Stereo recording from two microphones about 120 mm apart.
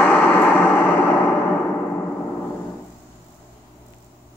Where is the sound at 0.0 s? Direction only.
15° left (ahead or behind).